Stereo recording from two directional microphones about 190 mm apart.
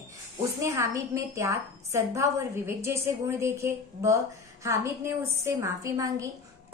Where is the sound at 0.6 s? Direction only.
15° right (ahead or behind).